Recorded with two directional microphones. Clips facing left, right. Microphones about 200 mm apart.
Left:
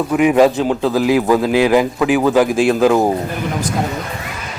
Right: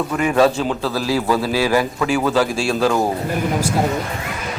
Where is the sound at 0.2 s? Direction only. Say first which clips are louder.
Left 4 dB; 15° left (ahead or behind).